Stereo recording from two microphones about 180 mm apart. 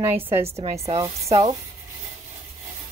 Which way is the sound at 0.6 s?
30° right (ahead or behind).